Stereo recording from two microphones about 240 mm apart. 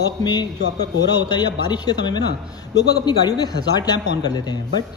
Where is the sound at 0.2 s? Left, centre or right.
Centre.